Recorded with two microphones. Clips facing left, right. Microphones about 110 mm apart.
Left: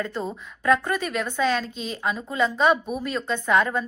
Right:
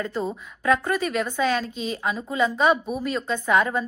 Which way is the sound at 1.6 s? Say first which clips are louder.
Right 3 dB; 45° right (ahead or behind).